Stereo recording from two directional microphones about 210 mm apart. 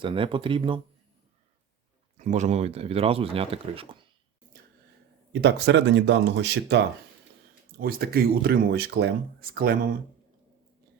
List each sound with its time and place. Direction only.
0.0 s speech: 25° right (ahead or behind)
2.1 s speech: 35° right (ahead or behind)
5.3 s speech: 55° right (ahead or behind)
7.8 s speech: 45° right (ahead or behind)